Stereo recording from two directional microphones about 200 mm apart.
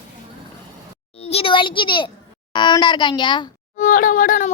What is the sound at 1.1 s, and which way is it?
A child's voice, 30° left (ahead or behind).